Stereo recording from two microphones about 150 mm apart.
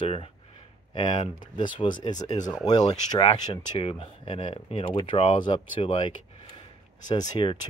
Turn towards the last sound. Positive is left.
turn(degrees=35)  # may be behind; listen again after turning